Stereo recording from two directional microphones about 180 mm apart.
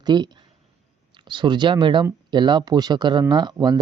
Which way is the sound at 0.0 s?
25° right (ahead or behind).